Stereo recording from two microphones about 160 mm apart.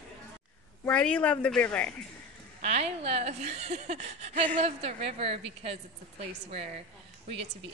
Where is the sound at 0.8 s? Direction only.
10° left (ahead or behind).